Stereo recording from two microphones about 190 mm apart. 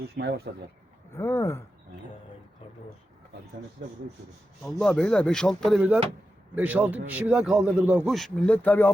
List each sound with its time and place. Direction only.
0.0 s speech: 60° right (ahead or behind)
1.1 s speech: 15° left (ahead or behind)
4.6 s a man's voice: 5° left (ahead or behind)